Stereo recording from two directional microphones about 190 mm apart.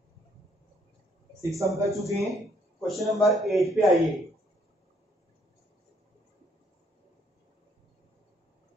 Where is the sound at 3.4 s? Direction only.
Centre (ahead or behind).